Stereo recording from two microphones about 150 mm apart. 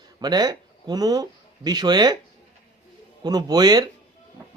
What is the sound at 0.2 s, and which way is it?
Speech, 25° right (ahead or behind).